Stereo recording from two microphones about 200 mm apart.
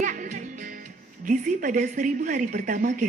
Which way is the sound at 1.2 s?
40° right (ahead or behind).